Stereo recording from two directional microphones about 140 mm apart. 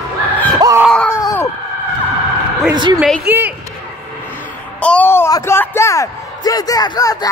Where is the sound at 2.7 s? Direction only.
30° right (ahead or behind).